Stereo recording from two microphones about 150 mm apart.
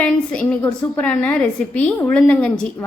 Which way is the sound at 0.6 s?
10° left (ahead or behind).